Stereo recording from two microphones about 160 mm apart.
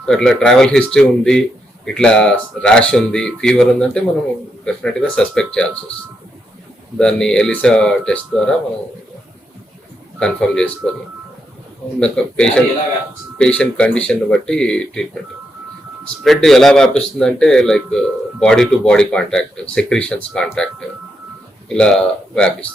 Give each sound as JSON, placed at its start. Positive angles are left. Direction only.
{"t": 0.0, "sound": "a man's voice", "side_deg": 5}
{"t": 7.0, "sound": "a man's voice", "side_deg": 5}
{"t": 10.2, "sound": "a man's voice", "side_deg": 5}
{"t": 11.9, "sound": "a man's voice", "side_deg": 5}
{"t": 16.2, "sound": "a man's voice", "side_deg": 0}
{"t": 21.7, "sound": "a man's voice", "side_deg": 5}